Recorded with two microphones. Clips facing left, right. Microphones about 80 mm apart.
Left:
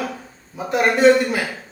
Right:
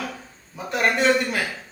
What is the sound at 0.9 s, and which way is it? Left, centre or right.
Speech, centre.